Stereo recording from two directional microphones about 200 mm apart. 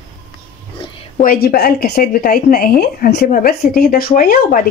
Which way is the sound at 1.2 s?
45° left (ahead or behind).